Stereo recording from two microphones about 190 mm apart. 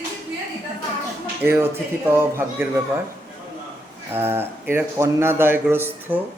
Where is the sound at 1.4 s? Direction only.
10° right (ahead or behind).